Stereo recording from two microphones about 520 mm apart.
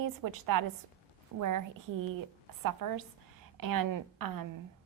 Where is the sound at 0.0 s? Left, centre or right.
Right.